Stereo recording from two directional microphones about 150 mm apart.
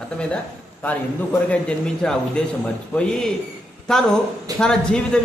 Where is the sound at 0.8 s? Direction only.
10° left (ahead or behind).